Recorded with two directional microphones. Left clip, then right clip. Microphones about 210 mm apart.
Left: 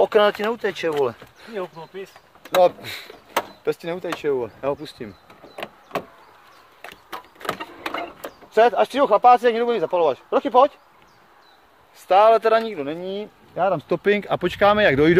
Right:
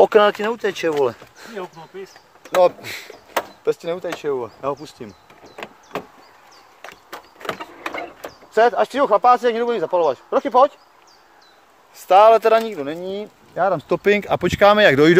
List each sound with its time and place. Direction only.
0.0 s speech: 15° right (ahead or behind)
2.6 s speech: 5° right (ahead or behind)
7.4 s a sound: 30° left (ahead or behind)
8.5 s speech: centre (ahead or behind)
12.1 s speech: 25° right (ahead or behind)